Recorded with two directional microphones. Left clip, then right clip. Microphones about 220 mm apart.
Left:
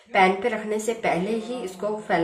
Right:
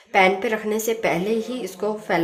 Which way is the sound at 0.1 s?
40° right (ahead or behind).